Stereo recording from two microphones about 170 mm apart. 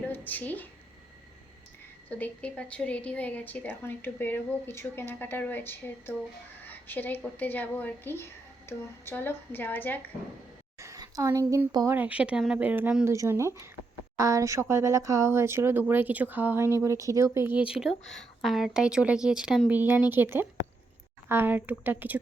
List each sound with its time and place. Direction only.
0.1 s speech: 10° left (ahead or behind)
2.0 s a woman's voice: 10° left (ahead or behind)
10.8 s speech: 20° right (ahead or behind)